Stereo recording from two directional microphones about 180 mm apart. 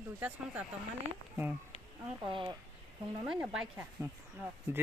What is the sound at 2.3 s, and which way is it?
Speech, 25° right (ahead or behind).